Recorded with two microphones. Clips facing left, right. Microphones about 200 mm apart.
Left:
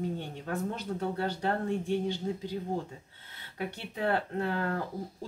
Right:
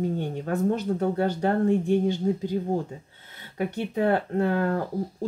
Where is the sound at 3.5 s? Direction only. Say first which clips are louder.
Right 10 dB; 50° right (ahead or behind).